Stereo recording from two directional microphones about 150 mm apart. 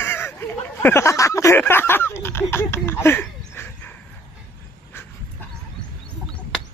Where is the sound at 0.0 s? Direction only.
15° left (ahead or behind).